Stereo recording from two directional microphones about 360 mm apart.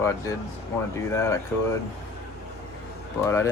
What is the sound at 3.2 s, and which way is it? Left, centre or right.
Speech, centre.